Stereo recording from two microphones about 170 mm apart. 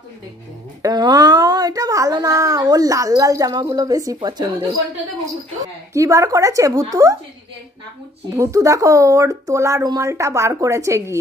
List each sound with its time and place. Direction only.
0.8 s a child's voice: 25° right (ahead or behind)
8.4 s speech: 20° right (ahead or behind)